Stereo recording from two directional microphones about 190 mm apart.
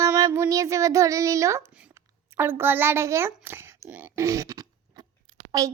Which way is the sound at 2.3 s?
10° right (ahead or behind).